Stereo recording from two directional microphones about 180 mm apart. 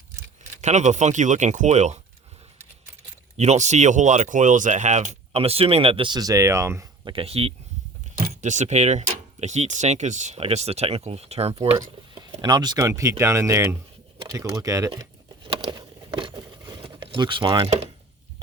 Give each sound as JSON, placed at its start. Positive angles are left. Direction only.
{"t": 0.6, "sound": "speech", "side_deg": -40}
{"t": 3.3, "sound": "speech", "side_deg": -40}
{"t": 7.1, "sound": "speech", "side_deg": -30}
{"t": 8.1, "sound": "speech", "side_deg": -50}
{"t": 11.8, "sound": "speech", "side_deg": -25}
{"t": 15.5, "sound": "a sound", "side_deg": -30}